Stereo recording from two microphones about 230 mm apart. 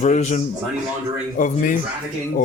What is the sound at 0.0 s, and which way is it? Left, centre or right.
Speech, left.